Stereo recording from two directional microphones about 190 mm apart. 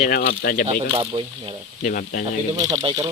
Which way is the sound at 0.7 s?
30° right (ahead or behind).